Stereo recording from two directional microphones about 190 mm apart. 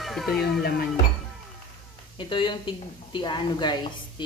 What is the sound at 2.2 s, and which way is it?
A woman's voice, 25° left (ahead or behind).